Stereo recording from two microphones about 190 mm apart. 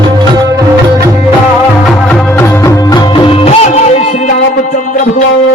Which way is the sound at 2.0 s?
15° left (ahead or behind).